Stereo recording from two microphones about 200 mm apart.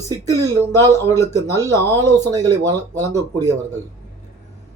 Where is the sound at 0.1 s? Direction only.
15° right (ahead or behind).